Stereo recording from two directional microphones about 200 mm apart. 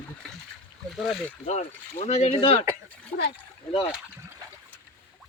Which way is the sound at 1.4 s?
35° left (ahead or behind).